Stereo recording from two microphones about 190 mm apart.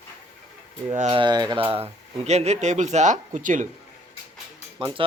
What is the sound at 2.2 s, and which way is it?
Speech, 35° right (ahead or behind).